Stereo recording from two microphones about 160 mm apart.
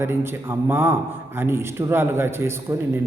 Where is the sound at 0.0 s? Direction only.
15° right (ahead or behind).